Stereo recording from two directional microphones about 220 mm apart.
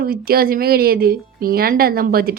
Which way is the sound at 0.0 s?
45° right (ahead or behind).